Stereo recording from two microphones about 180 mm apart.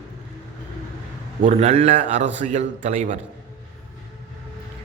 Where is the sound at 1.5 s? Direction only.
35° right (ahead or behind).